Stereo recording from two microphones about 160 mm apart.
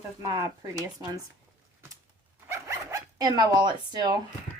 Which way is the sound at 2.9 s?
25° right (ahead or behind).